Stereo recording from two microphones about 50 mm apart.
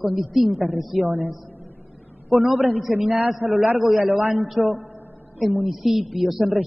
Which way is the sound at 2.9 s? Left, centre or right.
Right.